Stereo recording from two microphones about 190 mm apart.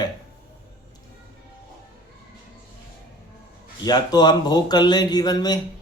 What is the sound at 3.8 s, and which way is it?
Speech, 20° left (ahead or behind).